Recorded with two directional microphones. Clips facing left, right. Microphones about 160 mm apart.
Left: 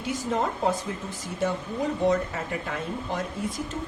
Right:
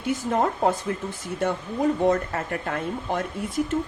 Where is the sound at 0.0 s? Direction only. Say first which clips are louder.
Right 4 dB; 55° right (ahead or behind).